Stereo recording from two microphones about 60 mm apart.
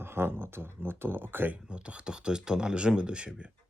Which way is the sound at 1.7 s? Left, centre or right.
Centre.